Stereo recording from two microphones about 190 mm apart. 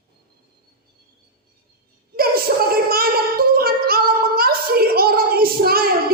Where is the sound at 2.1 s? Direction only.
50° right (ahead or behind).